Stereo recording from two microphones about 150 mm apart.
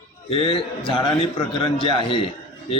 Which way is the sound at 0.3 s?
40° left (ahead or behind).